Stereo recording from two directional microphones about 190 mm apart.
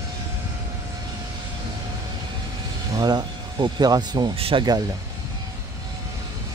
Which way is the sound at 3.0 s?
20° right (ahead or behind).